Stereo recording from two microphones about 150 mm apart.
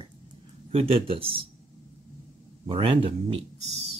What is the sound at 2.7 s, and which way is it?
Speech, 35° right (ahead or behind).